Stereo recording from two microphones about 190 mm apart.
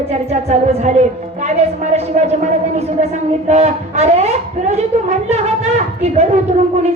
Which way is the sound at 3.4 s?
35° right (ahead or behind).